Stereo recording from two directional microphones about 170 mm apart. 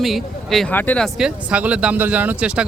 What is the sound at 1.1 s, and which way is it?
Speech, 5° right (ahead or behind).